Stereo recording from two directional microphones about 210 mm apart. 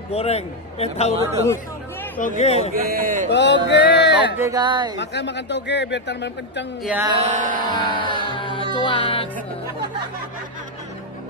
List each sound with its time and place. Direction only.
0.1 s a man's voice: 30° left (ahead or behind)
2.1 s speech: 35° left (ahead or behind)
2.7 s speech: 45° right (ahead or behind)
3.3 s speech: 55° left (ahead or behind)
4.4 s speech: 20° right (ahead or behind)
4.9 s speech: 55° left (ahead or behind)
6.8 s music: 5° right (ahead or behind)
7.1 s music: 30° right (ahead or behind)
7.6 s music: 20° left (ahead or behind)